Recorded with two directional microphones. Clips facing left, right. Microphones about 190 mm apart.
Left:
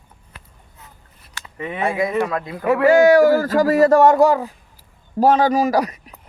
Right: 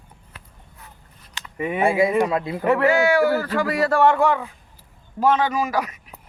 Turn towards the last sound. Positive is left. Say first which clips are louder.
# left 6 dB
turn(degrees=35)  # may be behind; listen again after turning